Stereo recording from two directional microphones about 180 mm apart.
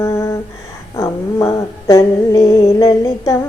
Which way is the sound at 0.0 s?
15° left (ahead or behind).